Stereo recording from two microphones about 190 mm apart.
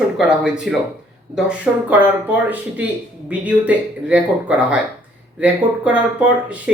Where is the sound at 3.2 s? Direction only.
10° right (ahead or behind).